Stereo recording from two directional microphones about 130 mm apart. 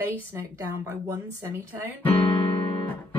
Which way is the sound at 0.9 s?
20° right (ahead or behind).